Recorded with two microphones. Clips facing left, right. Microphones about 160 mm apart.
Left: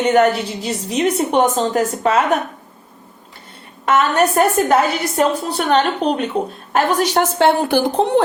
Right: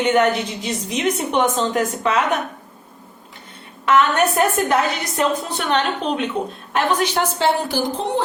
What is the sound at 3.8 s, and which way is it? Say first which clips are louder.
A woman's voice: left 1 dB; 40° left (ahead or behind).